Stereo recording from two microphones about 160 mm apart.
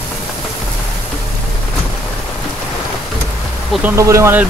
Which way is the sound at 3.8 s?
20° right (ahead or behind).